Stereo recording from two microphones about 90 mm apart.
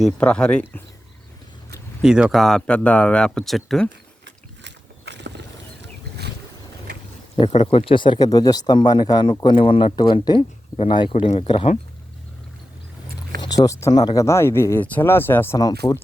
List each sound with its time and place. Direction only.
0.2 s speech: 10° left (ahead or behind)
2.0 s speech: 5° right (ahead or behind)
7.3 s speech: 90° left; by 8.3 s 65° left (ahead or behind)
8.3 s speech: 45° left (ahead or behind); by 9.9 s 70° left (ahead or behind)
9.9 s speech: 55° left (ahead or behind); by 11.7 s 85° left
13.4 s speech: 45° left (ahead or behind)
13.9 s speech: 50° left (ahead or behind)
14.2 s speech: 30° left (ahead or behind)
15.5 s speech: 45° left (ahead or behind)